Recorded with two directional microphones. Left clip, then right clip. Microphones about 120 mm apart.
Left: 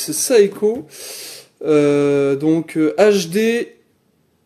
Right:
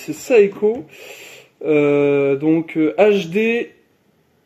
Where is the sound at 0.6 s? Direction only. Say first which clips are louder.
Even; 50° left (ahead or behind).